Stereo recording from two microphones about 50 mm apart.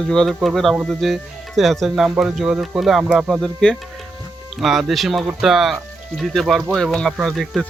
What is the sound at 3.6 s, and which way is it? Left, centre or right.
Speech, centre.